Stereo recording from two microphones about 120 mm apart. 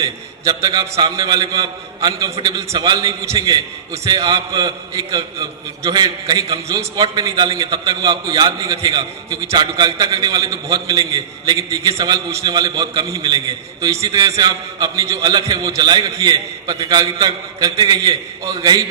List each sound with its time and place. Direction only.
0.0 s a man's voice: 35° right (ahead or behind)